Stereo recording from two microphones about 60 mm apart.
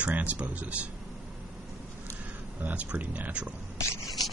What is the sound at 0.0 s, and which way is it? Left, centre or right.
Speech, right.